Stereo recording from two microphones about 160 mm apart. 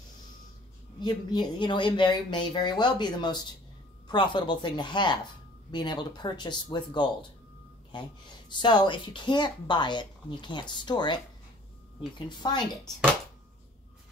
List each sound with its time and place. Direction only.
1.0 s a woman's voice: 30° left (ahead or behind)
12.3 s a woman's voice: 25° left (ahead or behind)